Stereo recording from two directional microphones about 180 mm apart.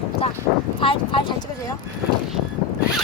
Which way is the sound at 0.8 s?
25° left (ahead or behind).